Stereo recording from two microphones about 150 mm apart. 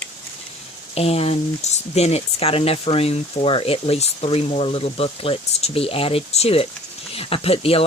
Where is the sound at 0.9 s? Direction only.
45° left (ahead or behind).